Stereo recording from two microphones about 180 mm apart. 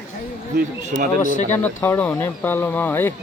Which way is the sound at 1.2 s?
45° left (ahead or behind).